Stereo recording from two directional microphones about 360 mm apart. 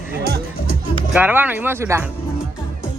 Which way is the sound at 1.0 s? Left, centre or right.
Centre.